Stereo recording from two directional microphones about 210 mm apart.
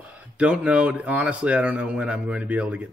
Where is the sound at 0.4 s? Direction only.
5° right (ahead or behind).